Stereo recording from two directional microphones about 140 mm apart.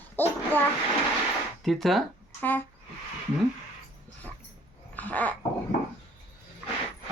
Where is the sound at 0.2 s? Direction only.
15° left (ahead or behind).